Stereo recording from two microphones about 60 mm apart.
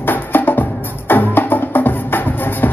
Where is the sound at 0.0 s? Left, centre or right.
Left.